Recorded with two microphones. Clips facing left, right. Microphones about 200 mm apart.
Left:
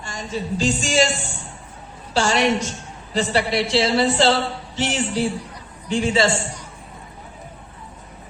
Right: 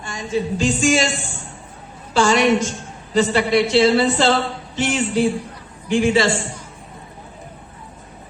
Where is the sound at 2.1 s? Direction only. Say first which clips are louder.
Right 4 dB; 50° right (ahead or behind).